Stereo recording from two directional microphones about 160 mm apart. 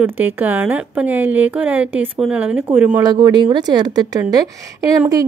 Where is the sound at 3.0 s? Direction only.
25° right (ahead or behind).